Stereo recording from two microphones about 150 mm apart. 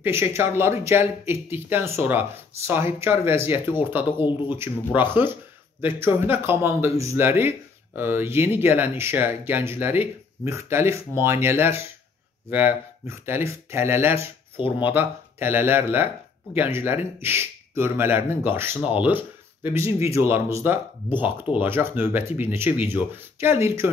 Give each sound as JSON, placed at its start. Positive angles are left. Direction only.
{"t": 0.0, "sound": "speech", "side_deg": -15}